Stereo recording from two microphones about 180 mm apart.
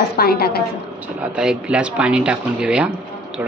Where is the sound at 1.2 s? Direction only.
5° right (ahead or behind).